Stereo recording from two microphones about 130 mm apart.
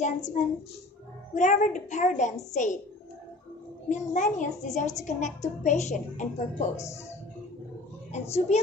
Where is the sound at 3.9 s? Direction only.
70° left (ahead or behind).